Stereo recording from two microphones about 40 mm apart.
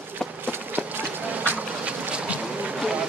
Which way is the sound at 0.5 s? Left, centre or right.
Right.